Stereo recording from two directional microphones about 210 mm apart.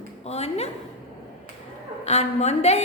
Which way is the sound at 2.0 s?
30° left (ahead or behind).